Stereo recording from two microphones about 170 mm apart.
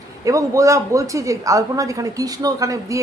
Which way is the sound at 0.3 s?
20° right (ahead or behind).